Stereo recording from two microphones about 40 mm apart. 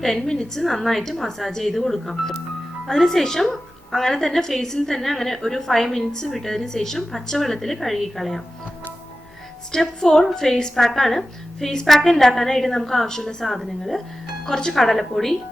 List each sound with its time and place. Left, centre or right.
0.0 s a woman's voice: centre
10.0 s a woman's voice: centre
14.4 s speech: centre
14.7 s speech: centre